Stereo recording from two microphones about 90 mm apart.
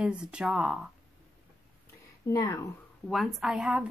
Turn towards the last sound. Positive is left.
turn(degrees=-10)  # may be behind; listen again after turning